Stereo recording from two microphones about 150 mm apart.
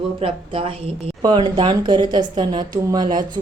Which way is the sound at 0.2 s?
35° right (ahead or behind).